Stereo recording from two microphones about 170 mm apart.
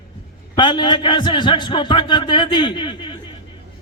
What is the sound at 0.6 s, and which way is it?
A man's voice, 25° left (ahead or behind).